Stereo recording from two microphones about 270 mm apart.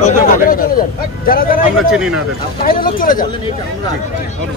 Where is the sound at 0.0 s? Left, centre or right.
Left.